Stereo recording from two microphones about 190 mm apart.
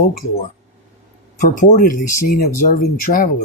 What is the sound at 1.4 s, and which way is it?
Speech, 45° left (ahead or behind).